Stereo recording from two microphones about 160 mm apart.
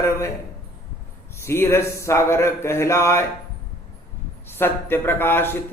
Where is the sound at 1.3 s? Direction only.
15° left (ahead or behind).